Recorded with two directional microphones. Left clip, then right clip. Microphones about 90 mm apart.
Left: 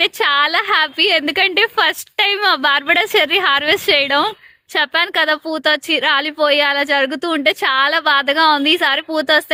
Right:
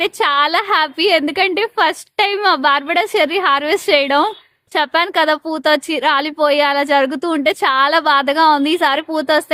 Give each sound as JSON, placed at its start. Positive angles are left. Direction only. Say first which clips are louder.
{"t": 0.0, "sound": "a woman's voice", "louder": "even", "side_deg": -35}
{"t": 3.8, "sound": "a woman's voice", "louder": "right 1 dB", "side_deg": -30}